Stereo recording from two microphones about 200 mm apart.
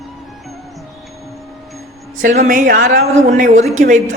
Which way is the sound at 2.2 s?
40° right (ahead or behind).